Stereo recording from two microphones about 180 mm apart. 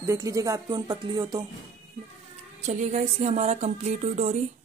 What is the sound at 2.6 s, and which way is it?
Speech, 40° right (ahead or behind).